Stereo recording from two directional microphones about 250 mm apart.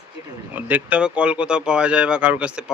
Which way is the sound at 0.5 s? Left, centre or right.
Centre.